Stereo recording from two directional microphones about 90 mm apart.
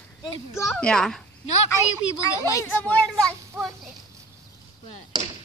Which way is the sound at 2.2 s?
35° left (ahead or behind).